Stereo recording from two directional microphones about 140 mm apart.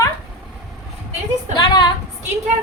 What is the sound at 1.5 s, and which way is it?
Speech, 30° left (ahead or behind).